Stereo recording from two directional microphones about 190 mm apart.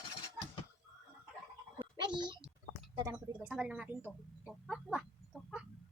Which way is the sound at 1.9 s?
25° right (ahead or behind).